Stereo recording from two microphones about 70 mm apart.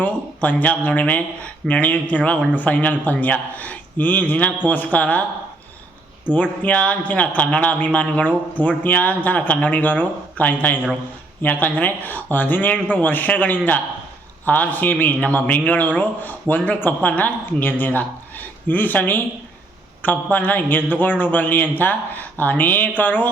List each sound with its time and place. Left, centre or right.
0.0 s a man's voice: left
6.2 s a man's voice: left
20.3 s a man's voice: left